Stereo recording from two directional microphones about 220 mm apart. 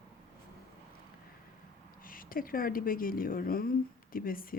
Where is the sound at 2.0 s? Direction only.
40° left (ahead or behind).